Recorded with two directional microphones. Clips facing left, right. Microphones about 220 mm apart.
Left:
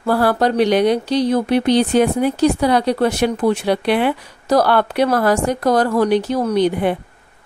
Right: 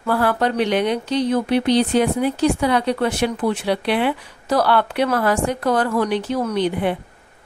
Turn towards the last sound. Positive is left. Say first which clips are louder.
# left 4 dB
turn(degrees=45)  # may be behind; listen again after turning